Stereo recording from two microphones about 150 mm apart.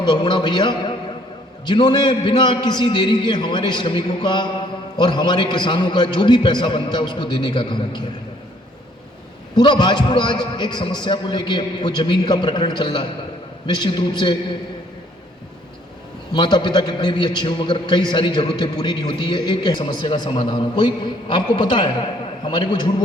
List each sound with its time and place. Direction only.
0.0 s a man's voice: 30° left (ahead or behind)
9.6 s a man's voice: 30° left (ahead or behind)
16.3 s a man's voice: 30° left (ahead or behind)